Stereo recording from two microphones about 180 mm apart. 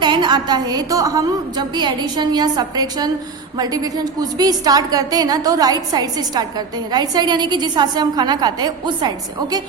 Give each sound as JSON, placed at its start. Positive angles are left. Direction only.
{"t": 0.0, "sound": "a woman's voice", "side_deg": -25}